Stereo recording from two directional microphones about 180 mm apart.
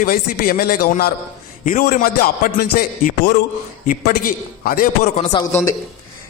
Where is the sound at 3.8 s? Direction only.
50° left (ahead or behind).